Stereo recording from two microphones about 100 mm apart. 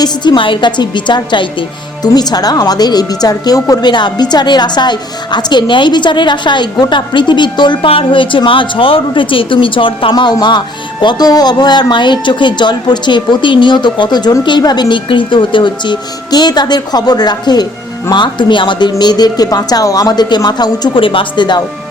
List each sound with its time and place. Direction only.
0.0 s speech: 50° left (ahead or behind)
2.1 s speech: 40° left (ahead or behind)
7.9 s a woman's voice: 65° left (ahead or behind); by 21.0 s 45° left (ahead or behind)
21.0 s a woman's voice: 60° left (ahead or behind)